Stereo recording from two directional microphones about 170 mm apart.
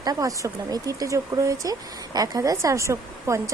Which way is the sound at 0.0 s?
20° right (ahead or behind).